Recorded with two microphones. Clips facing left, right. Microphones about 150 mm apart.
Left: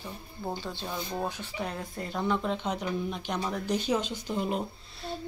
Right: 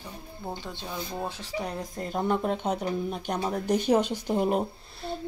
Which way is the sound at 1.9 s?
45° right (ahead or behind).